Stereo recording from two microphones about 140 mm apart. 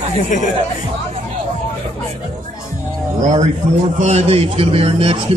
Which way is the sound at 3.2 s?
60° right (ahead or behind).